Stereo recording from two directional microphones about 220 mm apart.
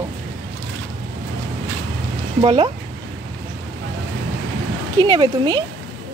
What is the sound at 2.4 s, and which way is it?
Speech, 20° right (ahead or behind).